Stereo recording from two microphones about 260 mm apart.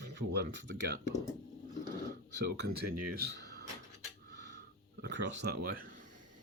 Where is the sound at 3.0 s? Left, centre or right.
Right.